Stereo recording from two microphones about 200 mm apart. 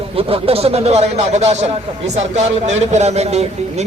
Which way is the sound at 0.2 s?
30° right (ahead or behind).